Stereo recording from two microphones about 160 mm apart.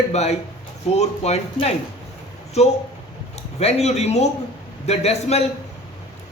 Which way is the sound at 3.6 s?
40° left (ahead or behind).